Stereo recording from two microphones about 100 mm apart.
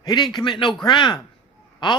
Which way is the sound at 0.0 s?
45° left (ahead or behind).